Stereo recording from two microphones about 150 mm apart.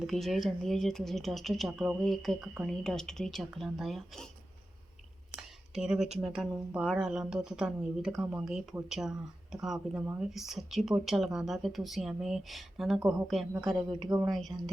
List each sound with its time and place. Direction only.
0.1 s speech: centre (ahead or behind)
5.4 s a sound: 5° right (ahead or behind)
6.2 s speech: 5° right (ahead or behind)
13.7 s speech: 30° right (ahead or behind)
14.3 s speech: centre (ahead or behind)